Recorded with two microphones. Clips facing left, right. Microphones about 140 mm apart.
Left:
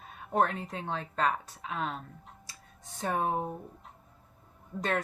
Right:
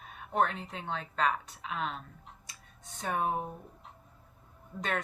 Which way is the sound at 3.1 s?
30° left (ahead or behind).